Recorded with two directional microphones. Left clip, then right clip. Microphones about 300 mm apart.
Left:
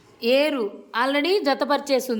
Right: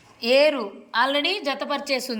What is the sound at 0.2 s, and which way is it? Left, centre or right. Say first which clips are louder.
A woman's voice: right 2 dB; centre.